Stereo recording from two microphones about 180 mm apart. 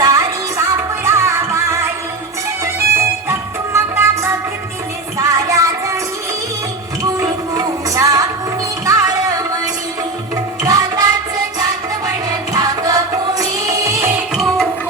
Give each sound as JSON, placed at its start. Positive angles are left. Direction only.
{"t": 0.0, "sound": "music", "side_deg": -20}
{"t": 7.0, "sound": "music", "side_deg": -20}
{"t": 10.6, "sound": "music", "side_deg": -20}
{"t": 12.5, "sound": "music", "side_deg": -20}
{"t": 14.3, "sound": "music", "side_deg": 0}